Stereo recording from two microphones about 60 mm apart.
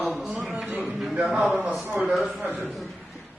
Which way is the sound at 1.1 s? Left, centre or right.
Right.